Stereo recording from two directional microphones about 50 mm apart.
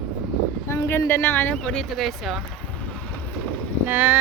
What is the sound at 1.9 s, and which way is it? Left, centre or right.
Speech, centre.